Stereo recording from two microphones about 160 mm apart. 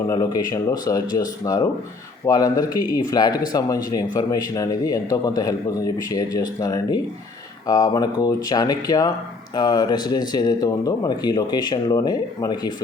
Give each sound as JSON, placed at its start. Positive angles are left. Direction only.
{"t": 0.1, "sound": "speech", "side_deg": 20}